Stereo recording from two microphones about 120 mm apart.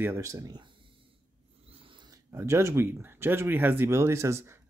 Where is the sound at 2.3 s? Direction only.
25° right (ahead or behind).